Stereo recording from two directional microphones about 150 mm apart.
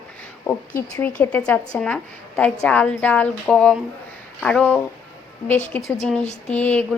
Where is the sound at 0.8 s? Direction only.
15° left (ahead or behind).